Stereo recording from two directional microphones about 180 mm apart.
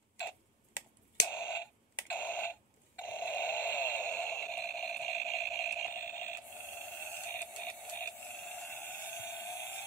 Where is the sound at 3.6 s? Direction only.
10° left (ahead or behind).